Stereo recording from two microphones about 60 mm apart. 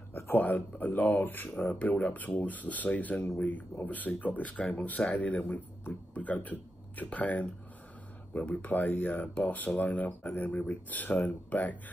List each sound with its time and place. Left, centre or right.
0.1 s speech: left